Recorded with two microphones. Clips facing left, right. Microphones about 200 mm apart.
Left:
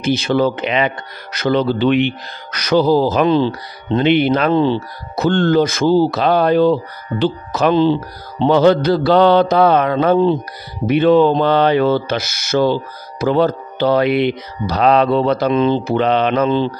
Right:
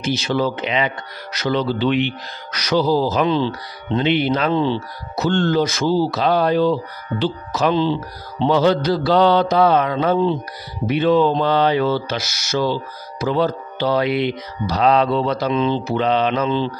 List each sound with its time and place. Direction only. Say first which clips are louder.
0.0 s speech: left 5 dB; 55° left (ahead or behind)